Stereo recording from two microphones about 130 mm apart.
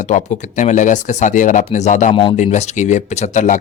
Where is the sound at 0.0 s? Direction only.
70° left (ahead or behind).